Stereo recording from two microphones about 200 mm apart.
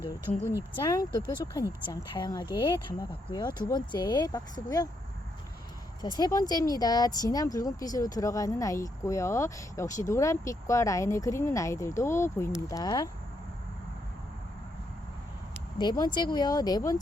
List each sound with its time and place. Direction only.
0.8 s speech: 20° left (ahead or behind)
6.0 s speech: 20° left (ahead or behind)
15.8 s speech: 20° left (ahead or behind)